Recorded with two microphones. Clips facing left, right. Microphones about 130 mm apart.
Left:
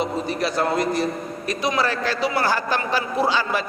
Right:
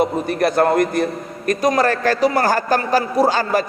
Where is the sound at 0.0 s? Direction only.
55° right (ahead or behind).